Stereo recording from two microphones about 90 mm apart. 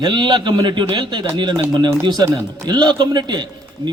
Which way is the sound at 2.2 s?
40° right (ahead or behind).